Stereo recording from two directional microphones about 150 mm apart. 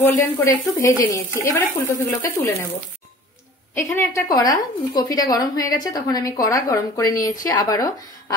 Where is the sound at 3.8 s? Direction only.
20° left (ahead or behind).